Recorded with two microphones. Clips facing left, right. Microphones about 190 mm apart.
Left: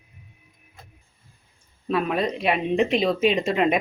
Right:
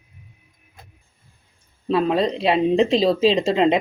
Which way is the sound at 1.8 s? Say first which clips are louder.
Right 4 dB; 30° right (ahead or behind).